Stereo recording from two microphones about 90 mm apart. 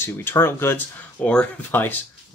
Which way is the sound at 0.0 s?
25° left (ahead or behind).